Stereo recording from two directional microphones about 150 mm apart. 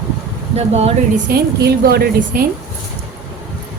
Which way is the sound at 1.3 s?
90° right.